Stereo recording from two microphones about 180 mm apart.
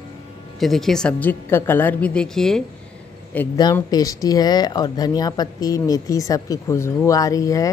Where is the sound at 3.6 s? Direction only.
20° left (ahead or behind).